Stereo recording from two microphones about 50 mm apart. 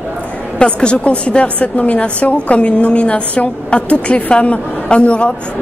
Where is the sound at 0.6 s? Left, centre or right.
Centre.